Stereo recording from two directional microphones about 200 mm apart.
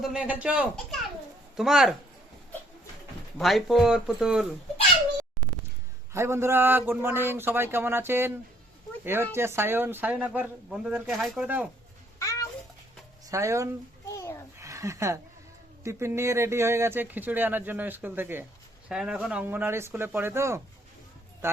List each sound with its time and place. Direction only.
0.0 s speech: 5° right (ahead or behind)
3.3 s speech: centre (ahead or behind)
6.1 s speech: 15° right (ahead or behind)
9.3 s speech: 10° right (ahead or behind)
12.2 s babbling: 15° left (ahead or behind)
13.3 s speech: 15° right (ahead or behind)
14.1 s a sound: 15° left (ahead or behind)
14.6 s a sound: 15° right (ahead or behind)
15.8 s speech: 15° right (ahead or behind)